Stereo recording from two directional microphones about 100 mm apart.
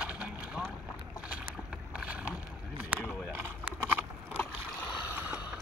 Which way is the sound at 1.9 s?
10° right (ahead or behind).